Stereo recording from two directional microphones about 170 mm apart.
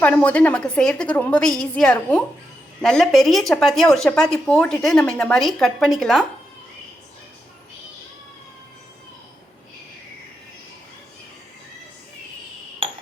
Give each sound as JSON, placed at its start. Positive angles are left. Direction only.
{"t": 0.0, "sound": "a woman's voice", "side_deg": 10}